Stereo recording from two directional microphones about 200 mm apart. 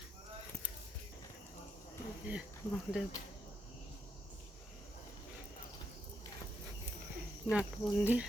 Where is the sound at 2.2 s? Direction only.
5° right (ahead or behind).